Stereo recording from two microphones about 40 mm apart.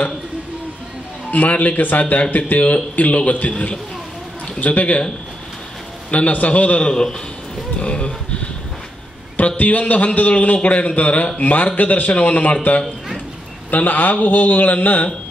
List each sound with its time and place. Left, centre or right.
1.3 s a man's voice: left
6.0 s a man's voice: left
6.9 s speech: centre
7.8 s speech: left
9.6 s a man's voice: left
13.7 s a man's voice: left